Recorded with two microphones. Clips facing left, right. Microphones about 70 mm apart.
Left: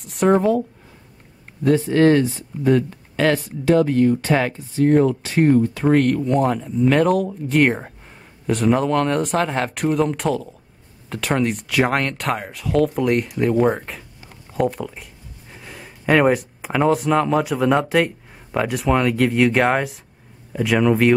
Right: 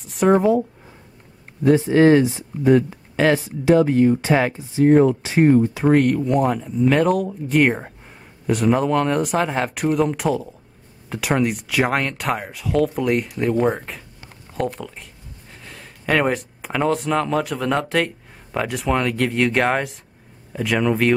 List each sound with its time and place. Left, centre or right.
0.0 s speech: centre
1.6 s speech: centre